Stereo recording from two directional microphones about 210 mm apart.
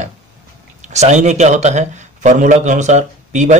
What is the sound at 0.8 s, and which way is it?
A man's voice, 35° right (ahead or behind).